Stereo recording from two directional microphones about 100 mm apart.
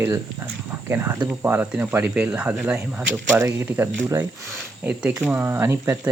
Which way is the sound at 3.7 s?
20° right (ahead or behind).